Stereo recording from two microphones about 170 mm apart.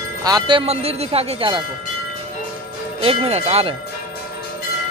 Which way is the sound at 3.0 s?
35° right (ahead or behind).